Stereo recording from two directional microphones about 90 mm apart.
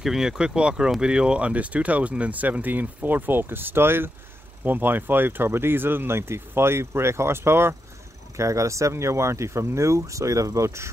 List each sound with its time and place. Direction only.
0.0 s speech: 5° right (ahead or behind); by 10.9 s 35° right (ahead or behind)